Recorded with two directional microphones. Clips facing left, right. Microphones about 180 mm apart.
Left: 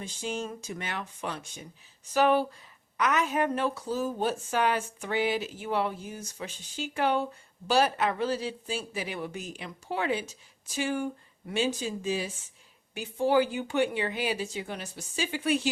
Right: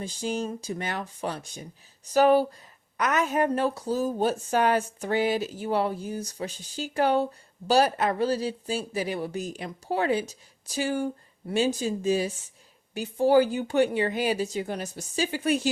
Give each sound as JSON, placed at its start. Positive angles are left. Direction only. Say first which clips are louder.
{"t": 0.0, "sound": "speech", "louder": "right 4 dB", "side_deg": -35}